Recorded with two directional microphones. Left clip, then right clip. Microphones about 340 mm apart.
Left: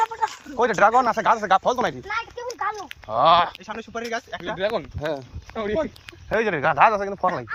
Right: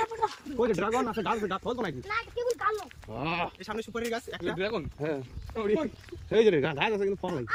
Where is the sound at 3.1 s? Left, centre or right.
Centre.